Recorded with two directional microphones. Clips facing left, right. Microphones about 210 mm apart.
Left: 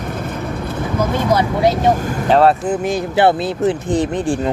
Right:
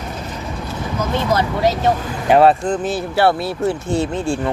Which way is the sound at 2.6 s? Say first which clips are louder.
Left 2 dB; 10° left (ahead or behind).